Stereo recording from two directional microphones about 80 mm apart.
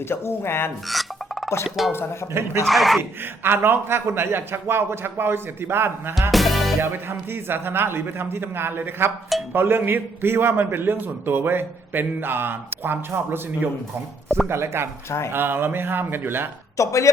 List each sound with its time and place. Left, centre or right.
0.1 s speech: left
0.9 s music: centre
1.6 s speech: centre
2.3 s speech: right
2.6 s speech: centre
3.0 s a man's voice: right
6.3 s music: centre
6.8 s a man's voice: right
14.4 s a man's voice: right
16.7 s speech: left